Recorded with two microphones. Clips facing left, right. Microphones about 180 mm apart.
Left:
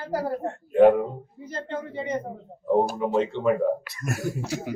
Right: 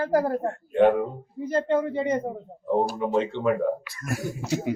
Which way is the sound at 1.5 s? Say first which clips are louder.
Right 8 dB; 50° right (ahead or behind).